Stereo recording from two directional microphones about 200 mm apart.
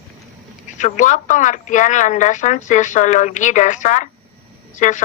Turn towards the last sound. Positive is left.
turn(degrees=40)  # may be behind; listen again after turning